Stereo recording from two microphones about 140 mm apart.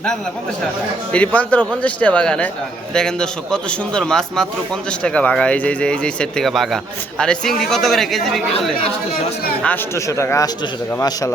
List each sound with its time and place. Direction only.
1.1 s a man's voice: 10° left (ahead or behind)
9.6 s a man's voice: 20° left (ahead or behind)